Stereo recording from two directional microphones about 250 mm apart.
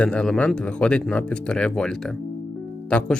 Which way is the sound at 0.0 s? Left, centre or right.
Centre.